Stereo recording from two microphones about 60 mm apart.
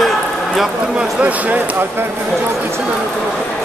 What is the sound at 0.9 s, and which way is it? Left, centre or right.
Speech, right.